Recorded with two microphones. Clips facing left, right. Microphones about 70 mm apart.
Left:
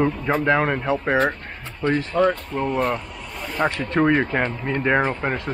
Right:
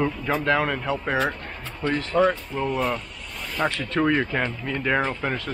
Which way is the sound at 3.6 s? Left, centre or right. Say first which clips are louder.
Left 3 dB; left.